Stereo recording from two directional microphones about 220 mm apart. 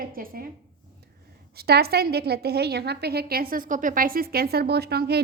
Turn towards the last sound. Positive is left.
turn(degrees=-45)  # may be behind; listen again after turning